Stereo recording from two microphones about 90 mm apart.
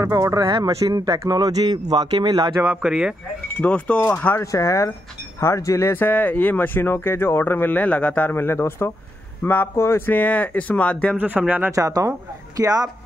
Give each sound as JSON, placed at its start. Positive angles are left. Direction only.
{"t": 0.0, "sound": "speech", "side_deg": -35}
{"t": 0.5, "sound": "speech", "side_deg": -60}
{"t": 2.6, "sound": "speech", "side_deg": -10}
{"t": 3.6, "sound": "speech", "side_deg": 15}
{"t": 4.4, "sound": "speech", "side_deg": 35}
{"t": 11.1, "sound": "speech", "side_deg": -15}
{"t": 11.7, "sound": "speech", "side_deg": -40}